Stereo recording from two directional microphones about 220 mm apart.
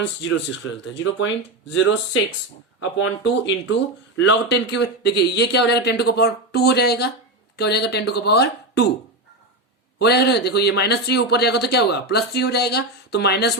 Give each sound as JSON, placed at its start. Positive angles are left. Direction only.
{"t": 0.0, "sound": "speech", "side_deg": 60}
{"t": 3.0, "sound": "speech", "side_deg": 55}
{"t": 10.0, "sound": "speech", "side_deg": 50}